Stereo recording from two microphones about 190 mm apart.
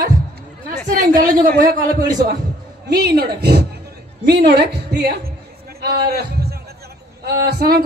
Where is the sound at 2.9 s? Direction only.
60° right (ahead or behind).